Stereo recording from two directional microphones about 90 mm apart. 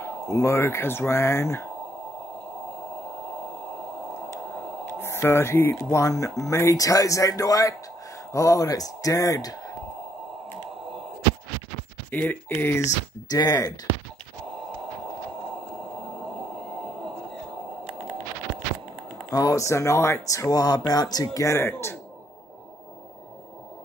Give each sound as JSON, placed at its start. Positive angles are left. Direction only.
{"t": 0.0, "sound": "speech", "side_deg": 30}
{"t": 5.0, "sound": "speech", "side_deg": 30}
{"t": 12.1, "sound": "speech", "side_deg": 20}
{"t": 13.3, "sound": "speech", "side_deg": 45}
{"t": 19.3, "sound": "speech", "side_deg": 40}
{"t": 21.5, "sound": "speech", "side_deg": 25}